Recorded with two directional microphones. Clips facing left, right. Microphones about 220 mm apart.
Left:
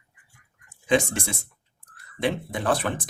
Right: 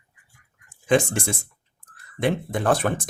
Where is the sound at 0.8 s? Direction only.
50° right (ahead or behind).